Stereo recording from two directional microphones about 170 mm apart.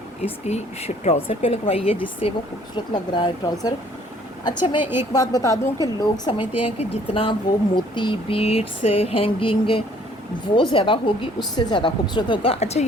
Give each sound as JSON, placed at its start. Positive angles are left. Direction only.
{"t": 0.4, "sound": "a woman's voice", "side_deg": 40}
{"t": 4.8, "sound": "a woman's voice", "side_deg": -10}
{"t": 5.1, "sound": "a woman's voice", "side_deg": 20}
{"t": 6.7, "sound": "a woman's voice", "side_deg": 35}